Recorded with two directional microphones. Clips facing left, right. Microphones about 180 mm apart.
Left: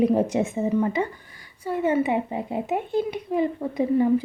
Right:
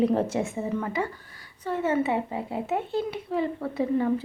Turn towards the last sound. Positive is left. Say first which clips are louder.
# left 4 dB
turn(degrees=15)  # may be behind; listen again after turning